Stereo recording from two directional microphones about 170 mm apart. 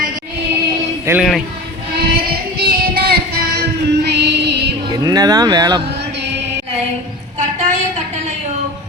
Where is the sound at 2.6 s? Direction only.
65° right (ahead or behind); by 4.7 s 80° right.